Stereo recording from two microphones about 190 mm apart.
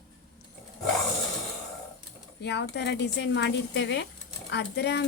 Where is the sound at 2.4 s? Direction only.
65° left (ahead or behind).